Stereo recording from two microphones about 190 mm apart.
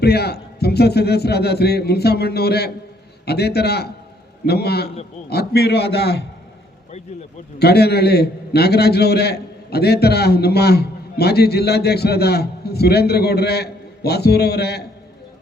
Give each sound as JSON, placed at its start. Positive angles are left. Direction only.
{"t": 0.0, "sound": "a man's voice", "side_deg": 60}
{"t": 7.6, "sound": "a man's voice", "side_deg": 60}